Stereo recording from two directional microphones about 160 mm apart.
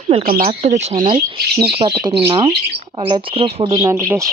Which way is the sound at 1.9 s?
20° right (ahead or behind).